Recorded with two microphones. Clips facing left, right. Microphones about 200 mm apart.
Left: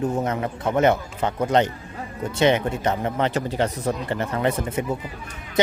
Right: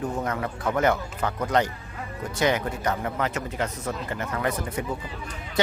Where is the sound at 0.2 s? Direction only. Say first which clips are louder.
Left 4 dB; 20° left (ahead or behind).